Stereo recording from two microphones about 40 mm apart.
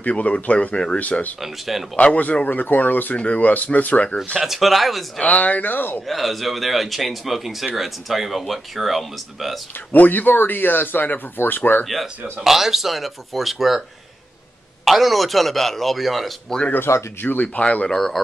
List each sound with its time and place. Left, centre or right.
0.1 s speech: left
1.4 s speech: centre
2.4 s speech: left
4.4 s speech: centre
5.2 s speech: left
6.0 s speech: centre
9.9 s speech: left
11.8 s speech: centre
14.9 s speech: centre
16.7 s speech: left
17.4 s speech: left
17.8 s speech: centre